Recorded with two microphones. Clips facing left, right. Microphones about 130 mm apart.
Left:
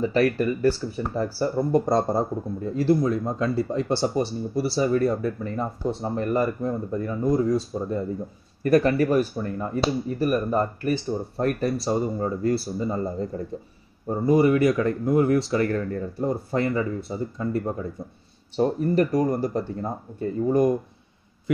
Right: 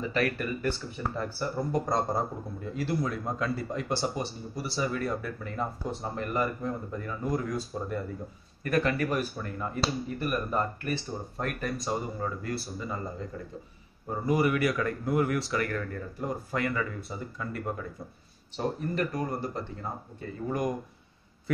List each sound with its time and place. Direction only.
0.0 s speech: 30° left (ahead or behind)